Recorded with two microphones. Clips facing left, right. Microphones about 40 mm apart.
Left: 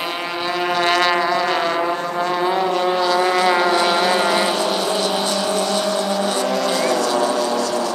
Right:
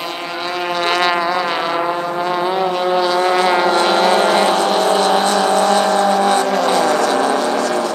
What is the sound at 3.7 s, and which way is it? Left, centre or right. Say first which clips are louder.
Vehicle: right 3 dB; right.